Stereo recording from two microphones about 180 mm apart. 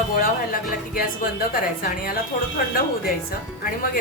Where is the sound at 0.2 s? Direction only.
50° left (ahead or behind).